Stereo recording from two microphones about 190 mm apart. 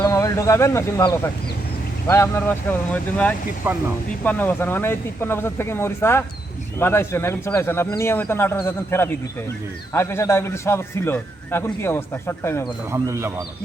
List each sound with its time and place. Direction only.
0.0 s a man's voice: 15° left (ahead or behind)
12.9 s a man's voice: 15° right (ahead or behind)